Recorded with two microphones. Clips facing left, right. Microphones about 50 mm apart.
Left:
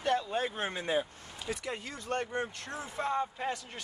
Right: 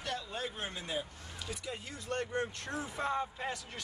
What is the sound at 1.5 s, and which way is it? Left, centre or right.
Speech, left.